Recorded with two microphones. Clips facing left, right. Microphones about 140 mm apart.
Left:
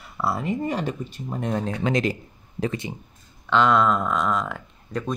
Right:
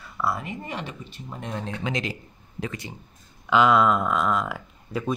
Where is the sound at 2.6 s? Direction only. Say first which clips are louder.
Left 6 dB; 25° left (ahead or behind).